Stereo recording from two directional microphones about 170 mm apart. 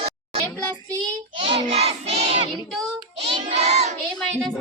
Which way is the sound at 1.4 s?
35° right (ahead or behind).